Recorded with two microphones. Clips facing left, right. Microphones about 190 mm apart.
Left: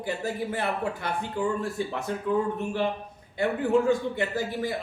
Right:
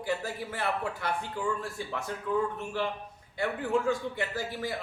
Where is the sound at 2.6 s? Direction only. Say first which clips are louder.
Left 5 dB; 20° left (ahead or behind).